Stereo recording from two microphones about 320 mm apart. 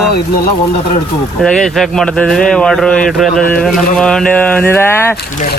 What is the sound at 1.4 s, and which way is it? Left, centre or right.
Speech, centre.